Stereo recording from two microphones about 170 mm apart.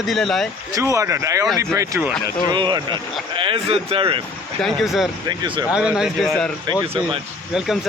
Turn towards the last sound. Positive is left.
turn(degrees=-5)  # may be behind; listen again after turning